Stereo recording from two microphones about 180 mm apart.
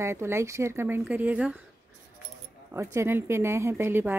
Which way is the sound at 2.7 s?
15° right (ahead or behind).